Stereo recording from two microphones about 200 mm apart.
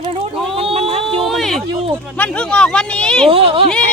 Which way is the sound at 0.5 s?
30° right (ahead or behind).